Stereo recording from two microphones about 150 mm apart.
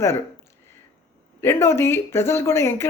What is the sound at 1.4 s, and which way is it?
Speech, 15° left (ahead or behind).